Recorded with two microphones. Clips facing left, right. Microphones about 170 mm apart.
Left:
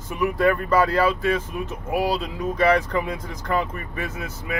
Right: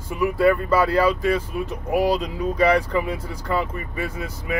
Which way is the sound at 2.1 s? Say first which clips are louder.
Right 3 dB; 40° right (ahead or behind).